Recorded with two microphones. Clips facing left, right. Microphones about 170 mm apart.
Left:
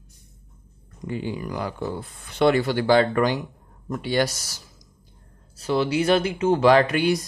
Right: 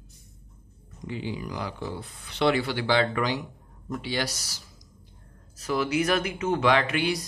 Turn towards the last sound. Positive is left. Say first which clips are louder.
# left 6 dB
turn(degrees=45)  # may be behind; listen again after turning